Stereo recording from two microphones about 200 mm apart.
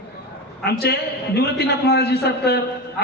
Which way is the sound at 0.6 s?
55° left (ahead or behind).